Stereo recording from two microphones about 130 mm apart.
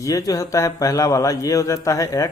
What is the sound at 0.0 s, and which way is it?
Speech, 25° left (ahead or behind).